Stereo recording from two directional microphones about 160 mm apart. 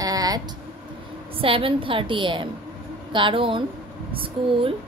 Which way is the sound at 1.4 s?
35° right (ahead or behind).